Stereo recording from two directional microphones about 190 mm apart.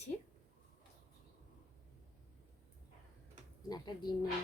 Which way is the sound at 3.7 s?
25° left (ahead or behind).